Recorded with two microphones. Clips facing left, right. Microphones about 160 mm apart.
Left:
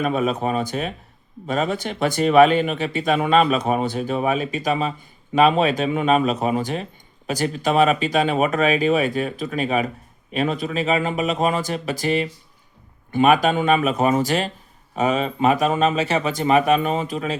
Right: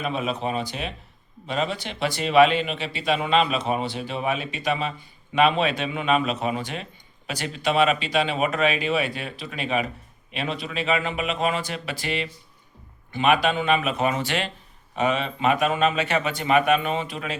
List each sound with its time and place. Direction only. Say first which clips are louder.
0.0 s speech: left 5 dB; 45° left (ahead or behind)